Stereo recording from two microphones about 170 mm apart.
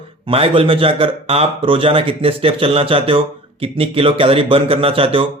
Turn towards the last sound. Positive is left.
turn(degrees=-35)  # may be behind; listen again after turning